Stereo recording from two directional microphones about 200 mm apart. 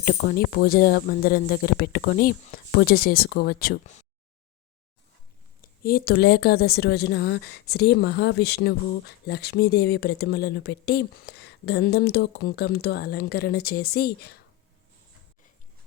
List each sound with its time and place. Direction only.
0.0 s a woman's voice: 50° left (ahead or behind)
5.6 s a woman's voice: 45° left (ahead or behind)